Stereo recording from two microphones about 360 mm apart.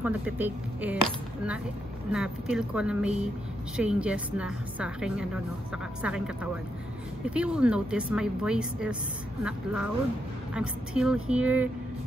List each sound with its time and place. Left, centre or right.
0.0 s a woman's voice: centre